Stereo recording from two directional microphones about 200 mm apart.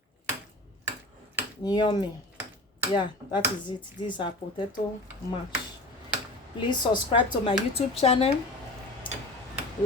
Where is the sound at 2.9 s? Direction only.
25° left (ahead or behind).